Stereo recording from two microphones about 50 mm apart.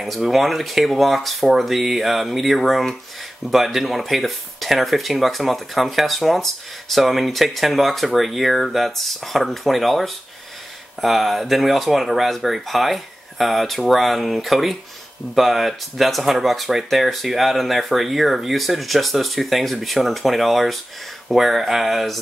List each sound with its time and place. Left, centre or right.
0.0 s speech: centre